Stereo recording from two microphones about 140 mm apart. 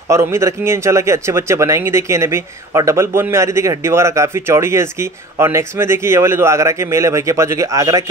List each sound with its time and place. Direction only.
0.1 s speech: 20° right (ahead or behind)